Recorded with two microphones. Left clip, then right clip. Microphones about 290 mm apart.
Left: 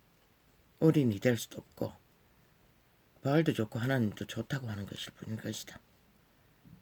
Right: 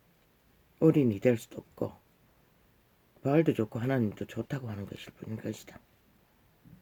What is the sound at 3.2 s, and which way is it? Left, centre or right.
Speech, left.